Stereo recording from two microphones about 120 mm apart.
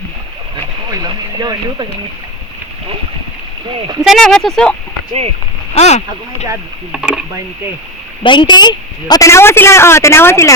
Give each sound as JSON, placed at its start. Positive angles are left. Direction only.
{"t": 0.9, "sound": "speech", "side_deg": -35}
{"t": 4.0, "sound": "speech", "side_deg": 0}
{"t": 5.7, "sound": "speech", "side_deg": 65}
{"t": 6.9, "sound": "speech", "side_deg": -10}
{"t": 8.2, "sound": "a woman's voice", "side_deg": 40}